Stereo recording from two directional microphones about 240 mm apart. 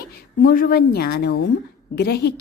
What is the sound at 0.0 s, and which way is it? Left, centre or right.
A woman's voice, left.